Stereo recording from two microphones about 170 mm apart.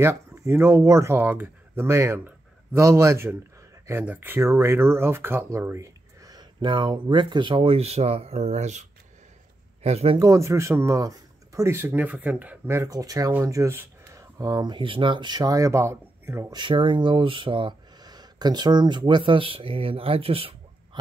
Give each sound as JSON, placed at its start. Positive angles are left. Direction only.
{"t": 0.0, "sound": "speech", "side_deg": -15}
{"t": 9.8, "sound": "speech", "side_deg": -40}
{"t": 10.1, "sound": "speech", "side_deg": -20}
{"t": 16.5, "sound": "speech", "side_deg": -30}